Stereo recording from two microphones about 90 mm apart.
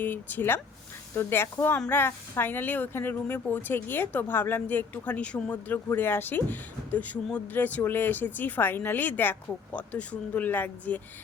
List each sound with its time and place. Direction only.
0.0 s a woman's voice: 20° left (ahead or behind)